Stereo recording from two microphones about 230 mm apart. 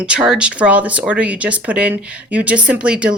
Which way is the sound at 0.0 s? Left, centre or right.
Centre.